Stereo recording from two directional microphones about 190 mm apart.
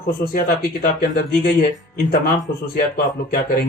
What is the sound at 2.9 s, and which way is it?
Speech, 50° left (ahead or behind).